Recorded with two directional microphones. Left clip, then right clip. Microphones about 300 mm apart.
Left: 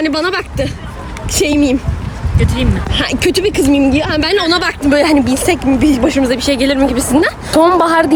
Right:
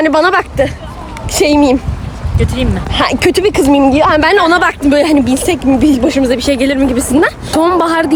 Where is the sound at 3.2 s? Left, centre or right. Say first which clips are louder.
Right 1 dB; centre.